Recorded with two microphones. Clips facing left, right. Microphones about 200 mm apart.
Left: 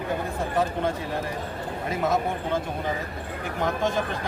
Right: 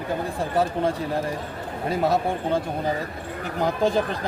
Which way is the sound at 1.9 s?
35° right (ahead or behind).